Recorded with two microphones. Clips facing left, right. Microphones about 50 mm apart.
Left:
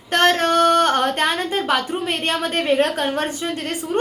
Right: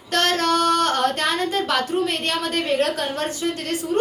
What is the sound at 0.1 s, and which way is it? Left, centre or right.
Speech, left.